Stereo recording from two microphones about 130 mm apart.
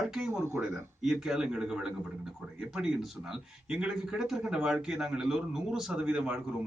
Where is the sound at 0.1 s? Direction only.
5° right (ahead or behind).